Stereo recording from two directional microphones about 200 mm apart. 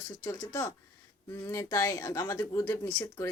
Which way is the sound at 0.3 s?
15° left (ahead or behind).